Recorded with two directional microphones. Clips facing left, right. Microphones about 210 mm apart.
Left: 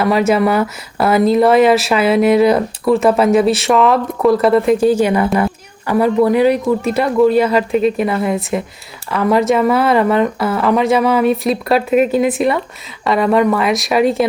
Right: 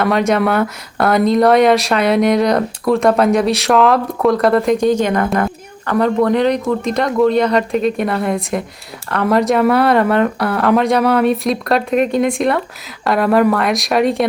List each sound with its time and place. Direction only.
0.0 s speech: 5° left (ahead or behind)